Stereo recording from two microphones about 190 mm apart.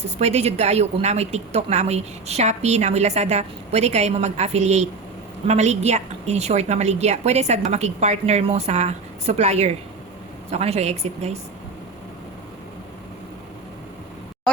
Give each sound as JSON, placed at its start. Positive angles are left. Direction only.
{"t": 0.2, "sound": "a woman's voice", "side_deg": -35}